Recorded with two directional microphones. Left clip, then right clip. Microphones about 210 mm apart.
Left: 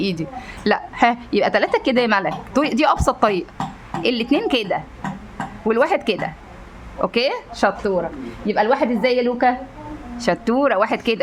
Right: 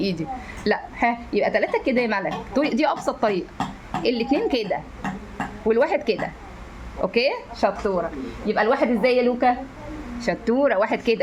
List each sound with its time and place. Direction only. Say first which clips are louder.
0.0 s a woman's voice: left 2 dB; 20° left (ahead or behind)
7.5 s a woman's voice: left 3 dB; 35° left (ahead or behind)
10.5 s speech: left 1 dB; 15° left (ahead or behind)